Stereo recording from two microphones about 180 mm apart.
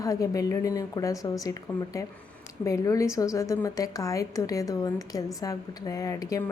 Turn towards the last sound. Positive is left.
turn(degrees=20)  # may be behind; listen again after turning